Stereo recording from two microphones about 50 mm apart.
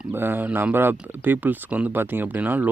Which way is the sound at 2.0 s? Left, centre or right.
Right.